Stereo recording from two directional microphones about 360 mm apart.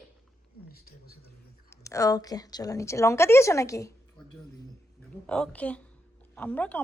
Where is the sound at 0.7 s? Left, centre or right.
Left.